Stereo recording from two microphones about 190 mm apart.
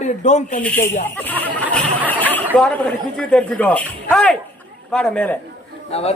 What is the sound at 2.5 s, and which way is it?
A woman's voice, 5° left (ahead or behind).